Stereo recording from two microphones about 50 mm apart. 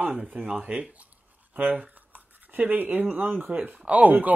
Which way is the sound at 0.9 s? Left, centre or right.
Right.